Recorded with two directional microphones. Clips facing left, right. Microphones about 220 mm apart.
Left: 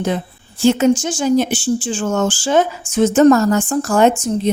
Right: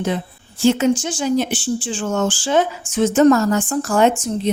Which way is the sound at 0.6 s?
45° left (ahead or behind).